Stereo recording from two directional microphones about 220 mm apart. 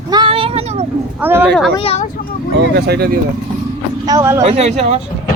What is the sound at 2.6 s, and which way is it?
Speech, 45° right (ahead or behind).